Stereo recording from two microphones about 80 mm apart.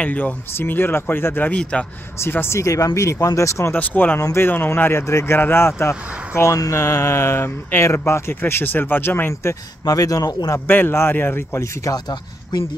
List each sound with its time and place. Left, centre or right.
0.0 s speech: left
1.6 s a man's voice: centre
2.1 s speech: left
3.7 s speech: left
9.3 s speech: left
10.7 s speech: left
12.5 s speech: left